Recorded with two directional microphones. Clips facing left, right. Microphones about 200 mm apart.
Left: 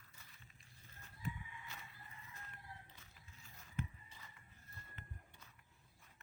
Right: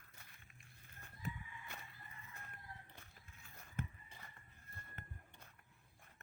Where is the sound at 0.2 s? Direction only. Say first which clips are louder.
Right 1 dB; 55° right (ahead or behind).